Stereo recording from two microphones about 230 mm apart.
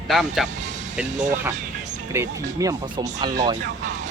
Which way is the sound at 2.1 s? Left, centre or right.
Centre.